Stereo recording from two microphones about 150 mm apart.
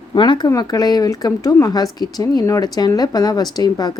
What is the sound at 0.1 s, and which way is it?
A woman's voice, 30° left (ahead or behind).